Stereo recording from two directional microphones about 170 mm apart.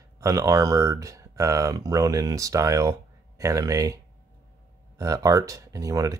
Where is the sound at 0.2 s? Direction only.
20° right (ahead or behind).